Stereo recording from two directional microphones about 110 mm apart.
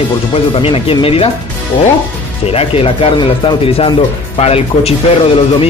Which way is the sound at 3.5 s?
50° left (ahead or behind).